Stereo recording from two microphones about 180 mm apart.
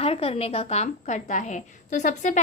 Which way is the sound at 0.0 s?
30° left (ahead or behind).